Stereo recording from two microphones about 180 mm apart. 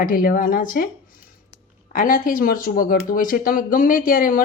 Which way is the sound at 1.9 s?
50° left (ahead or behind).